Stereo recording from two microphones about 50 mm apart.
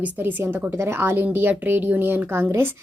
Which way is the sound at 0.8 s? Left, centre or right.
Right.